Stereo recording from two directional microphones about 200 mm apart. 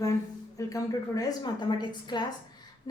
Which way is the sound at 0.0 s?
15° left (ahead or behind).